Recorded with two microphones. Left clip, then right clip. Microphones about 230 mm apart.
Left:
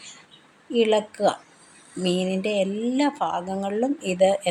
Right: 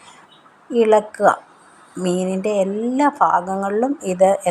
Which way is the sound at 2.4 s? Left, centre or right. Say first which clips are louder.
Right 5 dB; right.